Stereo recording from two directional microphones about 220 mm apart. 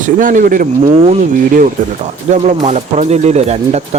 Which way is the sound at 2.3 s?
30° right (ahead or behind).